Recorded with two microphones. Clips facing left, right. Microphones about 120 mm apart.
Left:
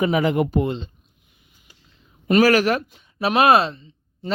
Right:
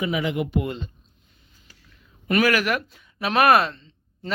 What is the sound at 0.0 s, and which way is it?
Speech, 45° left (ahead or behind).